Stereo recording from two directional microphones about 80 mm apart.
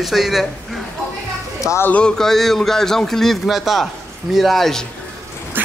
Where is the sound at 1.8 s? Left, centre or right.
Centre.